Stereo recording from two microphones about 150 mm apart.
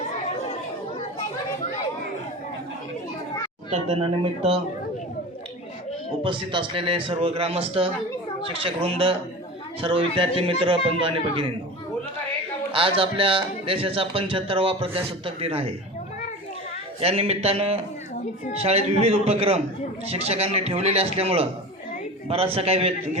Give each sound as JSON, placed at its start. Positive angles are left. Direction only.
{"t": 3.7, "sound": "a man's voice", "side_deg": -50}
{"t": 6.2, "sound": "a man's voice", "side_deg": -35}
{"t": 12.7, "sound": "a man's voice", "side_deg": -35}
{"t": 17.0, "sound": "a man's voice", "side_deg": -40}